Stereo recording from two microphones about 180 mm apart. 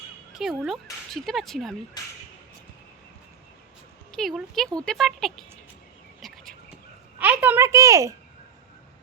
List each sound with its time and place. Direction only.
0.3 s speech: centre (ahead or behind)
2.0 s music: 20° left (ahead or behind)
4.1 s speech: centre (ahead or behind)
6.2 s bird: centre (ahead or behind)
7.2 s a woman's voice: 10° right (ahead or behind)